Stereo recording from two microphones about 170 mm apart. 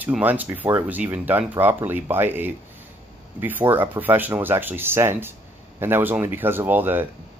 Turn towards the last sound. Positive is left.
turn(degrees=-10)  # may be behind; listen again after turning